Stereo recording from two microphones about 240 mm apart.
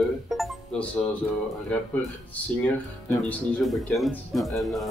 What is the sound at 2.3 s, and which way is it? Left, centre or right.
Speech, centre.